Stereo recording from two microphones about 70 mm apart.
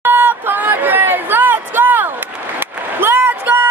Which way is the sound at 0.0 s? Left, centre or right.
Right.